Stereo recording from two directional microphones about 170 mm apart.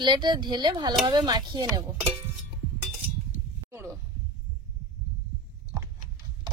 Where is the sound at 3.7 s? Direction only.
15° right (ahead or behind).